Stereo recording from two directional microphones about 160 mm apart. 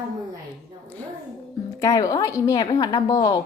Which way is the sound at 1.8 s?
20° left (ahead or behind).